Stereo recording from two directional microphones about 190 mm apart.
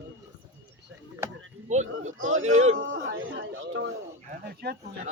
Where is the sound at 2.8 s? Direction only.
85° right.